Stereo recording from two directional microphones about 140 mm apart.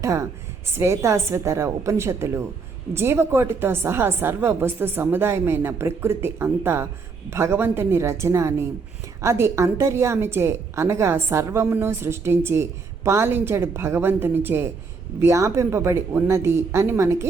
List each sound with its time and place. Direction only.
0.0 s a woman's voice: 20° right (ahead or behind)